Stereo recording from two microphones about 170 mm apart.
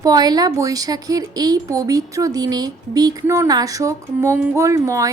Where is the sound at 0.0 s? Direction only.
25° right (ahead or behind).